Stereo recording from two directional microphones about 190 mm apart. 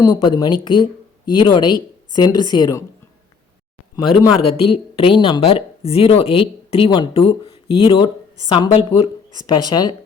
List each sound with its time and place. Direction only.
0.0 s speech: 20° left (ahead or behind)
4.4 s speech: 30° left (ahead or behind)